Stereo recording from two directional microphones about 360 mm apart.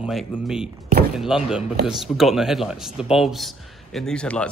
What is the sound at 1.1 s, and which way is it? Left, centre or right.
A man's voice, centre.